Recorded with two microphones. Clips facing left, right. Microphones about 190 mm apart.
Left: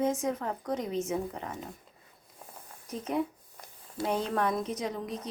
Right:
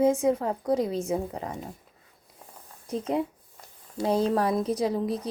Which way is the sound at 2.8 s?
30° right (ahead or behind).